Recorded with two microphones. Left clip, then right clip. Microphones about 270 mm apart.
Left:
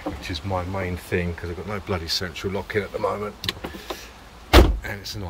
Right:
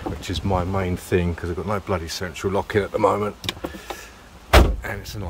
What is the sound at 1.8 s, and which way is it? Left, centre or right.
Speech, centre.